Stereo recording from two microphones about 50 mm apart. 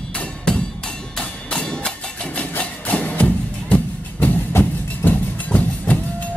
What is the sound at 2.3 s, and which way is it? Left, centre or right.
Music, left.